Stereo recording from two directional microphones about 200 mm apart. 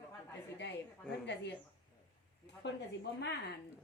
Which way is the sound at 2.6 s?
60° left (ahead or behind).